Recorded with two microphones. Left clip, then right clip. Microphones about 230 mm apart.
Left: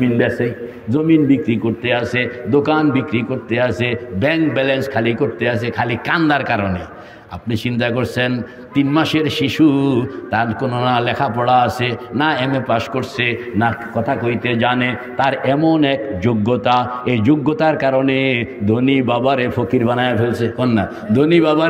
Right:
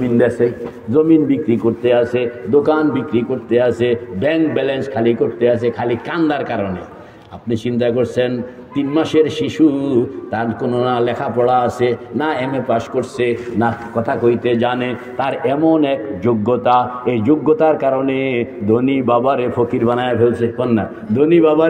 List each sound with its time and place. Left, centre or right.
0.9 s a man's voice: left